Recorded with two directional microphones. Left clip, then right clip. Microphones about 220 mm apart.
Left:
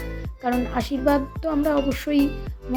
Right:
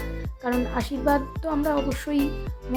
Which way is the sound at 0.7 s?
10° left (ahead or behind).